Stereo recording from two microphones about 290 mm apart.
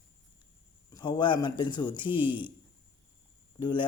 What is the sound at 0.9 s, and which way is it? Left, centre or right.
Speech, centre.